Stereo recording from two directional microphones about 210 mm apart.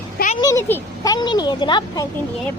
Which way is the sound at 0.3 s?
15° left (ahead or behind).